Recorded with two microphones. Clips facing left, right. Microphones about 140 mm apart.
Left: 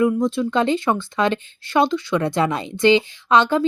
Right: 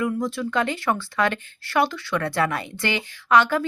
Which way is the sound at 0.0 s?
20° left (ahead or behind).